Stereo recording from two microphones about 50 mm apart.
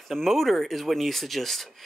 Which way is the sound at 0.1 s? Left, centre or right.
Centre.